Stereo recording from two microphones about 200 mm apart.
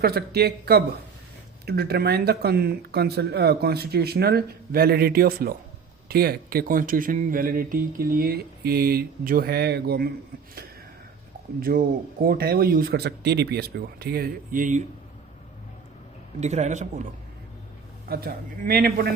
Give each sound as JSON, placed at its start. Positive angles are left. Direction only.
{"t": 0.0, "sound": "speech", "side_deg": -50}
{"t": 11.6, "sound": "speech", "side_deg": -45}
{"t": 16.4, "sound": "a man's voice", "side_deg": -35}
{"t": 18.1, "sound": "speech", "side_deg": -50}